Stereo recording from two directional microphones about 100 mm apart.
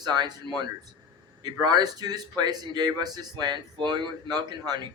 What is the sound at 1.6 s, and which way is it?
A man's voice, 40° right (ahead or behind).